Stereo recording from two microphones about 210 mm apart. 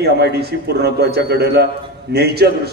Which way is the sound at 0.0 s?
50° right (ahead or behind).